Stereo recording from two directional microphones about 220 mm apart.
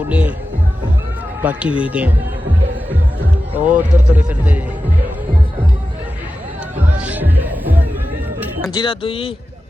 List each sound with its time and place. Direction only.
0.1 s music: 5° right (ahead or behind)
1.4 s speech: 5° right (ahead or behind)
3.5 s a man's voice: 5° right (ahead or behind)
7.0 s music: 5° right (ahead or behind)
8.7 s speech: 20° left (ahead or behind)